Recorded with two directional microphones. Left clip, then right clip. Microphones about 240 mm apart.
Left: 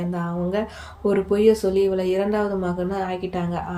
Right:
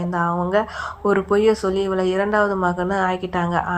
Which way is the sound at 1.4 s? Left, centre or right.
Centre.